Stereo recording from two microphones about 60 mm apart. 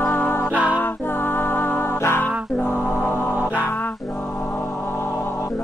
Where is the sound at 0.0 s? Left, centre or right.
Left.